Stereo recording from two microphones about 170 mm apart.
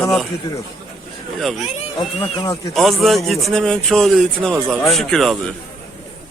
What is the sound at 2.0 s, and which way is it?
Speech, 35° left (ahead or behind).